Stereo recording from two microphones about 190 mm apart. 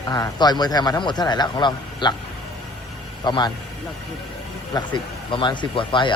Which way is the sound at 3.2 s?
25° left (ahead or behind).